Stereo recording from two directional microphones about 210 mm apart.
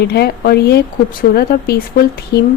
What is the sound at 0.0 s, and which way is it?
Speech, 50° left (ahead or behind).